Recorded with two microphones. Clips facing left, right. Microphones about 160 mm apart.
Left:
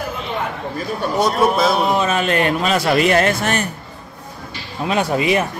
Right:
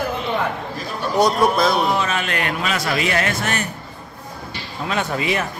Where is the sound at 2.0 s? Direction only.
30° left (ahead or behind).